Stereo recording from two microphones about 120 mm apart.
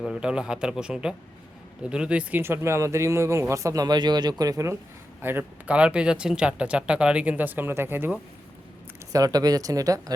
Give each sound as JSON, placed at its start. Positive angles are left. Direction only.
{"t": 0.0, "sound": "speech", "side_deg": -5}
{"t": 9.1, "sound": "speech", "side_deg": -30}